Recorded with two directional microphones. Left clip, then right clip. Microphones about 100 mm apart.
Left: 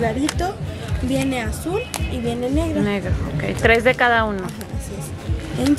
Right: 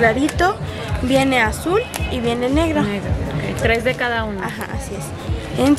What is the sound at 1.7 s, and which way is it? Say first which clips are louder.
Speech: right 5 dB; 30° left (ahead or behind).